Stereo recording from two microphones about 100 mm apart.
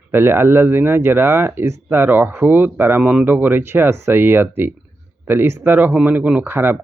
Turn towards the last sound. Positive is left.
turn(degrees=-20)  # may be behind; listen again after turning